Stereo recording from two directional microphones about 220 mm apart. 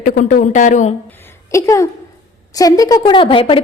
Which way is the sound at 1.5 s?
15° left (ahead or behind).